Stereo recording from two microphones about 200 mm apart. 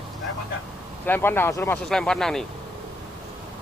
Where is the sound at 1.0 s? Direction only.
10° left (ahead or behind).